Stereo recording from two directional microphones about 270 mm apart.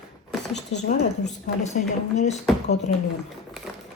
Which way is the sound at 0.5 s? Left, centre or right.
Left.